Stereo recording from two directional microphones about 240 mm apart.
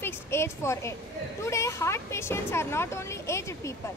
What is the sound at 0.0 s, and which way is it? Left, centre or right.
Speech, centre.